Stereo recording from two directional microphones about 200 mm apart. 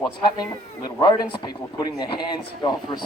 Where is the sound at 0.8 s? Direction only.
20° left (ahead or behind).